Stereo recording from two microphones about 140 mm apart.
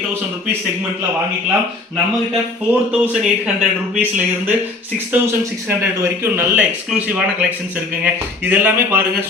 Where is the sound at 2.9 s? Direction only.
5° right (ahead or behind).